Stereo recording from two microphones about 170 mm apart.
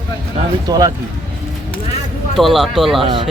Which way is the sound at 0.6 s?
20° right (ahead or behind).